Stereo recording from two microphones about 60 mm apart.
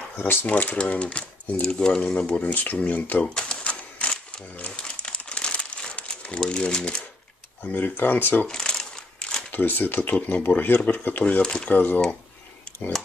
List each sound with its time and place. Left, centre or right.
0.2 s speech: left
3.3 s typewriter: centre
4.6 s crumpling: left
7.6 s speech: left
8.5 s crumpling: centre
9.5 s speech: left; by 11.7 s centre
11.7 s speech: left